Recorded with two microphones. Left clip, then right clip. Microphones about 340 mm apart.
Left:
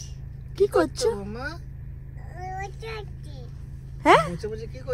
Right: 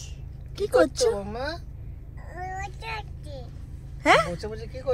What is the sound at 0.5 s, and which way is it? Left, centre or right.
Speech, centre.